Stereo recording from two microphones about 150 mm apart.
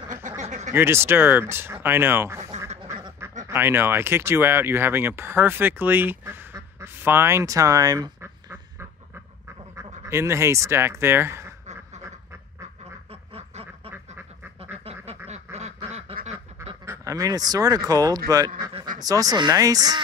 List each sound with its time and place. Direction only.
0.4 s a sound: 50° right (ahead or behind)
0.7 s speech: 15° right (ahead or behind)
3.4 s speech: 15° right (ahead or behind)
10.0 s speech: 20° right (ahead or behind)
13.1 s duck: 40° right (ahead or behind)
16.8 s speech: 20° right (ahead or behind)